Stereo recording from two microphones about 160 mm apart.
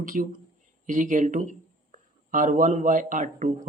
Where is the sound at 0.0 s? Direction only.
60° right (ahead or behind).